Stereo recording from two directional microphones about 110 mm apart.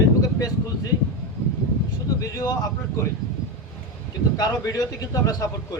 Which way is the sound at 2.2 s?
30° left (ahead or behind).